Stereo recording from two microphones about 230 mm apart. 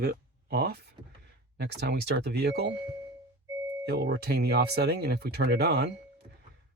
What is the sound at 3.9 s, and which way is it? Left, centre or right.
Speech, right.